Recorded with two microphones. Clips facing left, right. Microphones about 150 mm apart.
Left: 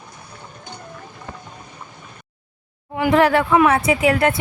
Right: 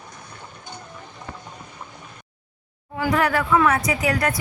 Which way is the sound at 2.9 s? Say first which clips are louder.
Left 6 dB; 25° left (ahead or behind).